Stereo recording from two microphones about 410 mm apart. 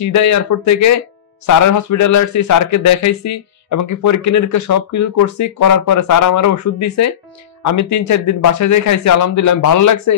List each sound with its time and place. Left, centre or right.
0.0 s speech: left